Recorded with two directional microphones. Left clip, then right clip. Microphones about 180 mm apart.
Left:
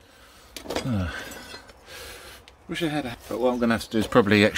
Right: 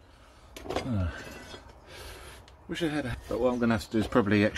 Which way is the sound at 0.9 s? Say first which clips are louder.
Left 6 dB; 45° left (ahead or behind).